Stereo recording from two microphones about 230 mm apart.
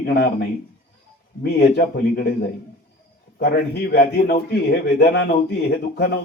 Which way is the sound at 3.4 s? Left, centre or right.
Left.